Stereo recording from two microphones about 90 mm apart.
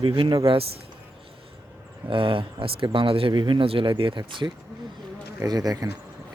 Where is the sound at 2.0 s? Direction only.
70° right (ahead or behind).